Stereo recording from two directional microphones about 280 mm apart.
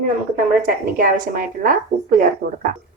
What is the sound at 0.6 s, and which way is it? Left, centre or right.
Speech, right.